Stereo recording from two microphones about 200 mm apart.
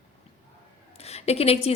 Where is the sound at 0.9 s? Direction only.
30° left (ahead or behind).